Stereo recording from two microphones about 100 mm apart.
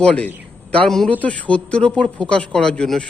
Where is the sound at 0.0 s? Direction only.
15° left (ahead or behind).